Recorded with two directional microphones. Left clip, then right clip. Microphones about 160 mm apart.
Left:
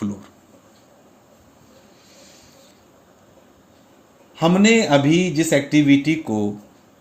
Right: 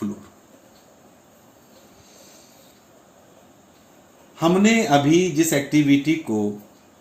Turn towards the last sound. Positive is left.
turn(degrees=90)